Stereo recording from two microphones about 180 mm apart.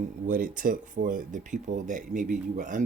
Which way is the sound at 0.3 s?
50° right (ahead or behind).